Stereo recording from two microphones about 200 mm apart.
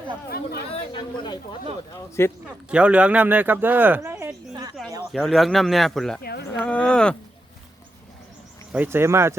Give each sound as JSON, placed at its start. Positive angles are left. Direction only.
{"t": 0.3, "sound": "speech", "side_deg": 50}
{"t": 0.7, "sound": "speech", "side_deg": 25}
{"t": 2.6, "sound": "speech", "side_deg": -5}
{"t": 5.1, "sound": "speech", "side_deg": 0}
{"t": 8.7, "sound": "speech", "side_deg": -10}